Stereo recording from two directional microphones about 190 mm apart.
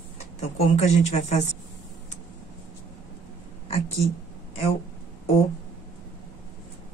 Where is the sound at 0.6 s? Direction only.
35° left (ahead or behind).